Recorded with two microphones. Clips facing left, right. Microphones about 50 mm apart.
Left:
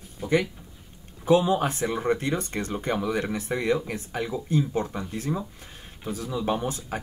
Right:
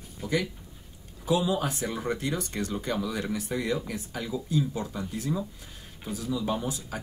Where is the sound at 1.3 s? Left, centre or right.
Left.